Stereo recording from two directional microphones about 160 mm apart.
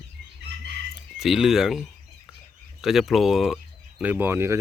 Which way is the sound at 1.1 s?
Centre (ahead or behind).